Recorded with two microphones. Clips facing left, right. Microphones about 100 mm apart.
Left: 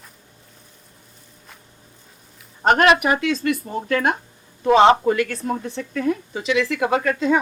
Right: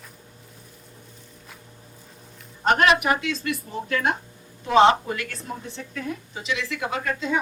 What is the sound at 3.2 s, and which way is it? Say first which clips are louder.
A woman's voice: left 7 dB; 55° left (ahead or behind).